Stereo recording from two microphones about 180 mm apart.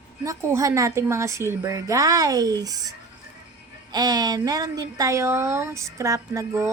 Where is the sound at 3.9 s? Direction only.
20° right (ahead or behind).